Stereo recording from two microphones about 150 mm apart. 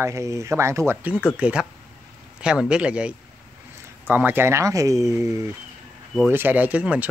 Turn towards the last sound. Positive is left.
turn(degrees=-10)  # may be behind; listen again after turning